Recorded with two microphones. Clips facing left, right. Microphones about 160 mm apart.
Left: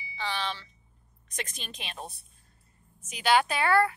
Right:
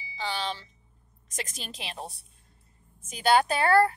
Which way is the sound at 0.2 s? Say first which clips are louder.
Right 1 dB; 30° right (ahead or behind).